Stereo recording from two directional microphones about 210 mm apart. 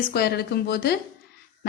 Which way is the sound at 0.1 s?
50° left (ahead or behind).